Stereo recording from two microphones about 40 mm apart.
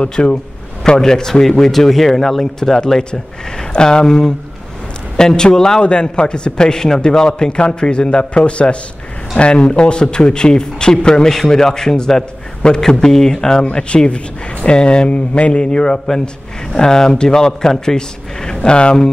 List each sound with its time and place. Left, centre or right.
0.0 s a man's voice: left; by 2.8 s centre
3.0 s a man's voice: left
16.7 s a man's voice: centre